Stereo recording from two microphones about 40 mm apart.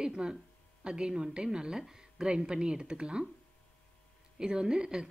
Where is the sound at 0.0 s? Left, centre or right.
Right.